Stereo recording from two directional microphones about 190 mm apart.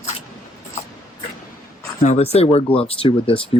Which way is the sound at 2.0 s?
35° left (ahead or behind).